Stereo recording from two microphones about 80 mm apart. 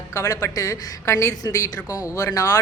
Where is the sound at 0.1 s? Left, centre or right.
Left.